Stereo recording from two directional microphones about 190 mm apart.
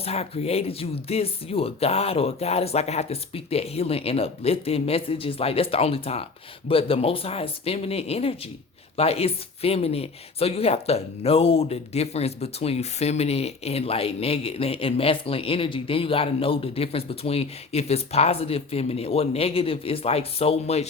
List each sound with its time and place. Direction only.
0.0 s speech: 35° left (ahead or behind)